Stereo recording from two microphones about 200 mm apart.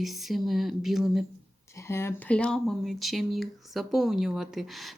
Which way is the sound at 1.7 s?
15° left (ahead or behind).